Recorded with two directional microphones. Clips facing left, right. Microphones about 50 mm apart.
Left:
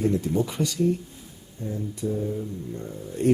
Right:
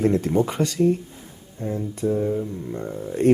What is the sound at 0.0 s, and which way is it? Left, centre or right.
Speech, right.